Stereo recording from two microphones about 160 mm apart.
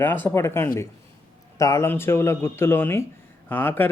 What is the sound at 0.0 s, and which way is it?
Speech, 10° left (ahead or behind).